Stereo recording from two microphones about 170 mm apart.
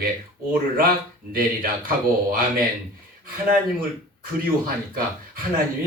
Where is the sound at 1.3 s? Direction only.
55° right (ahead or behind).